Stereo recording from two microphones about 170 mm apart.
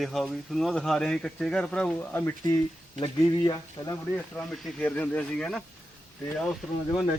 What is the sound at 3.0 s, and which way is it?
Speech, 25° left (ahead or behind).